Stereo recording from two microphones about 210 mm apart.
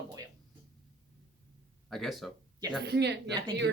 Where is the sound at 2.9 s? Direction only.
55° right (ahead or behind).